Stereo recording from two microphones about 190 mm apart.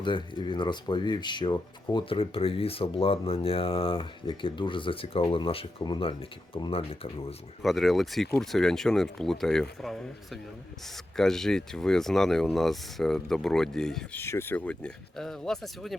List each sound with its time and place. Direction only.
0.0 s speech: 25° left (ahead or behind)
7.6 s speech: centre (ahead or behind)
11.2 s speech: centre (ahead or behind)